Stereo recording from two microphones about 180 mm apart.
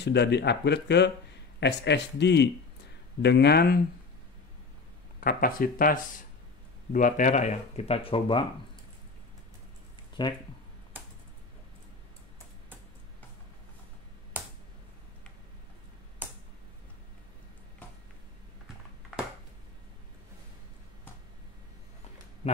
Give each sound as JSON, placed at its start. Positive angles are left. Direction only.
{"t": 0.0, "sound": "speech", "side_deg": 70}
{"t": 5.2, "sound": "speech", "side_deg": 55}
{"t": 10.2, "sound": "speech", "side_deg": 25}